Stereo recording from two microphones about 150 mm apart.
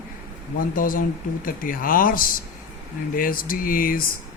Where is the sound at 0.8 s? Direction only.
65° left (ahead or behind).